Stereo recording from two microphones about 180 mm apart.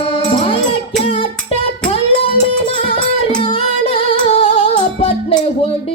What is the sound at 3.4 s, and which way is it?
Music, 30° left (ahead or behind).